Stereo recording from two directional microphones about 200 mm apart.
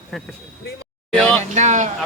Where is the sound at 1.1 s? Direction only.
5° left (ahead or behind).